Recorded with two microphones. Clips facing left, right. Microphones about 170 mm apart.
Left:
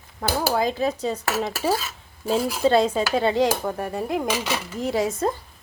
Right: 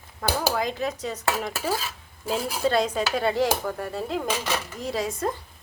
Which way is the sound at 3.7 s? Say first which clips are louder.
Left 3 dB; 15° left (ahead or behind).